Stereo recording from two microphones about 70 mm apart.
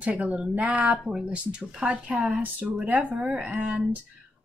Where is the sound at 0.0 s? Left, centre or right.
Centre.